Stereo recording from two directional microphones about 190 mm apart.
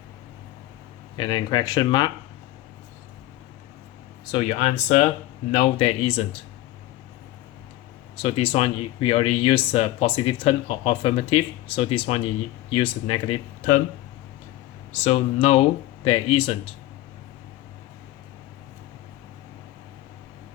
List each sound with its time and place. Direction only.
1.1 s speech: 25° left (ahead or behind)
4.3 s speech: 30° left (ahead or behind)
8.1 s speech: 30° left (ahead or behind)
15.0 s speech: 35° left (ahead or behind)